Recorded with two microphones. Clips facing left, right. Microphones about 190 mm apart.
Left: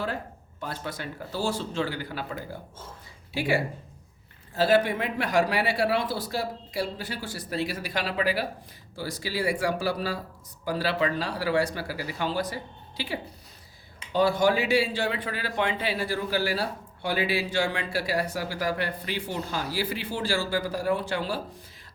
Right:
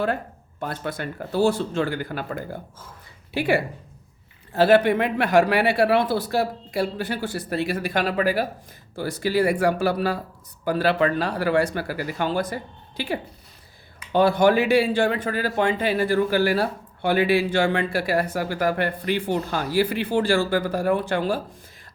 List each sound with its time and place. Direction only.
0.6 s speech: 55° right (ahead or behind)